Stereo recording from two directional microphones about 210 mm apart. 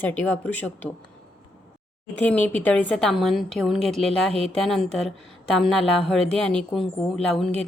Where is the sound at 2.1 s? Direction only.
10° left (ahead or behind).